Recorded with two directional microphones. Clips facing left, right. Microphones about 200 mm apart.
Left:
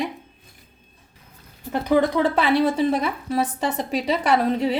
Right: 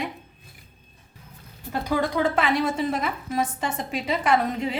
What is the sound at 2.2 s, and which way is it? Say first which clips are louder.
A woman's voice: left 4 dB; 35° left (ahead or behind).